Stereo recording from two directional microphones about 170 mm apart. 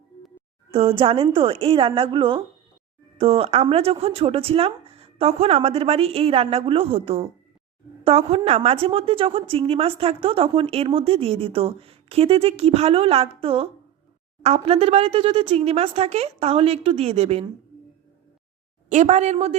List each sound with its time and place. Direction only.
0.7 s a woman's voice: 35° right (ahead or behind)
18.9 s a woman's voice: 45° right (ahead or behind)